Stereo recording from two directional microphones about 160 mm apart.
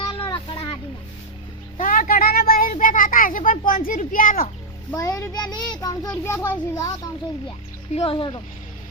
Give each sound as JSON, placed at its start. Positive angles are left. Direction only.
{"t": 0.1, "sound": "vehicle", "side_deg": 30}
{"t": 1.8, "sound": "a sound", "side_deg": 60}
{"t": 3.7, "sound": "a child's voice", "side_deg": 60}
{"t": 4.9, "sound": "a child's voice", "side_deg": 20}
{"t": 7.9, "sound": "speech", "side_deg": 30}